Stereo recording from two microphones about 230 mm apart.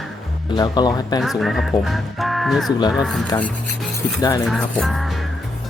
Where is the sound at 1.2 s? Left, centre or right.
Centre.